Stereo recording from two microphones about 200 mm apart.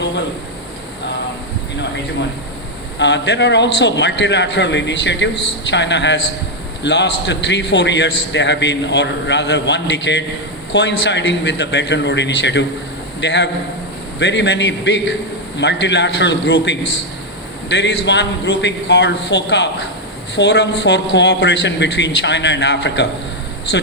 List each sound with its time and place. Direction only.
3.0 s a man's voice: 60° left (ahead or behind)